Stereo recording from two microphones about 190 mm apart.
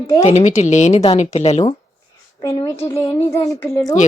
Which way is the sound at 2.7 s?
15° left (ahead or behind).